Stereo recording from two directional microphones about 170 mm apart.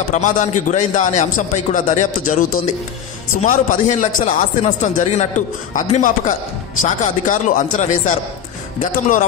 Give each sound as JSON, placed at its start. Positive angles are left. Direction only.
{"t": 0.1, "sound": "speech", "side_deg": 45}